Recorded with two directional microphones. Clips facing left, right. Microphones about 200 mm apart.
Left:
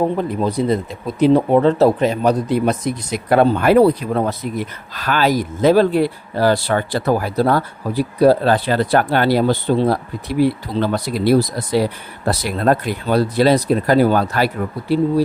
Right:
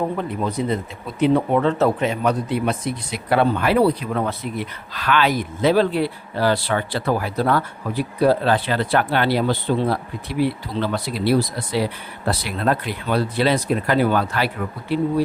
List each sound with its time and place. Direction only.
0.2 s speech: 35° left (ahead or behind)